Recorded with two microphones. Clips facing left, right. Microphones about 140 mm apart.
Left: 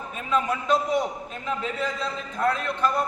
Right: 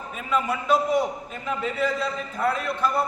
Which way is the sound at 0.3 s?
10° right (ahead or behind).